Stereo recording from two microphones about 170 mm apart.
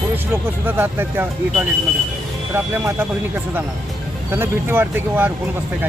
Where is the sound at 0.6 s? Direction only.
10° right (ahead or behind).